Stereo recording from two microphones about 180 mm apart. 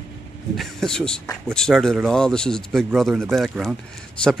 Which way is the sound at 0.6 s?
5° left (ahead or behind).